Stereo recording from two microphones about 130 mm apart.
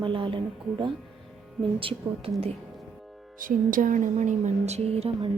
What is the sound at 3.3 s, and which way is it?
A woman's voice, 90° right.